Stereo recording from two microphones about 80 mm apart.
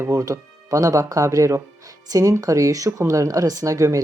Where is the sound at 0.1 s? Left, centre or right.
Right.